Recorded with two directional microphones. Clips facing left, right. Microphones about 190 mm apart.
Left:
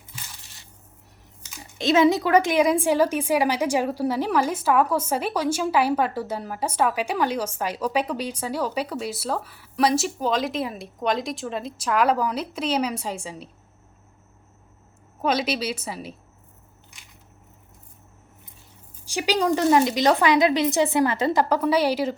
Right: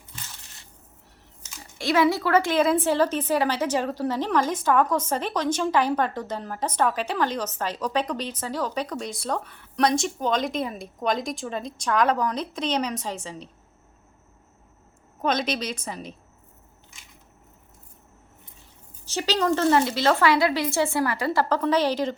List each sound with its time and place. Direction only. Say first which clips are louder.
1.8 s a woman's voice: left 3 dB; 20° left (ahead or behind)
15.2 s a woman's voice: left 2 dB; 5° left (ahead or behind)
19.0 s a woman's voice: left 1 dB; 15° left (ahead or behind)